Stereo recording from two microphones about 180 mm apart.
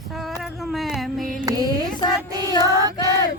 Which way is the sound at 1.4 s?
20° right (ahead or behind).